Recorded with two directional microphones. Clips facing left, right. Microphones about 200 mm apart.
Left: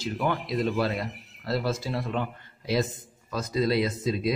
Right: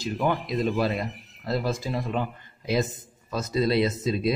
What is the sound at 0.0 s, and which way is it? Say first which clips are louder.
Speech: right 2 dB; 15° right (ahead or behind).